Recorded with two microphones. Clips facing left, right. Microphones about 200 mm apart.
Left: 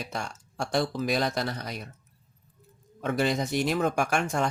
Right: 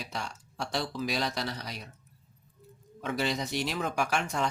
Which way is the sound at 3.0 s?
50° left (ahead or behind).